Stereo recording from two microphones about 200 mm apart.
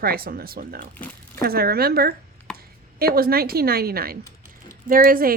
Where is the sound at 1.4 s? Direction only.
50° right (ahead or behind).